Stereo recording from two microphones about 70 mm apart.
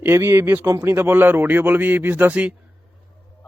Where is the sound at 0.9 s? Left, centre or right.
Right.